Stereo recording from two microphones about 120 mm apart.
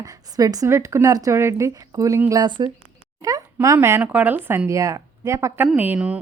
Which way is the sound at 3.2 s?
30° right (ahead or behind).